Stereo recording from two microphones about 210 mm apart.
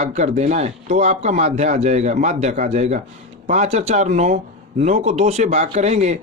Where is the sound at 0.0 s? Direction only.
30° right (ahead or behind).